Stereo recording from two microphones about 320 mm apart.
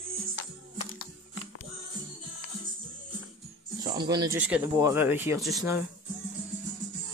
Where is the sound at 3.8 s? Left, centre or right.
Centre.